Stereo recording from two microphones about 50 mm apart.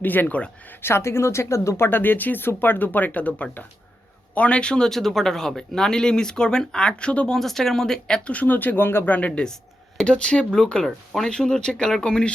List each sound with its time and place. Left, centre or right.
0.0 s speech: left
0.8 s speech: left
2.0 s speech: left
7.3 s speech: centre
8.3 s speech: left
9.0 s speech: left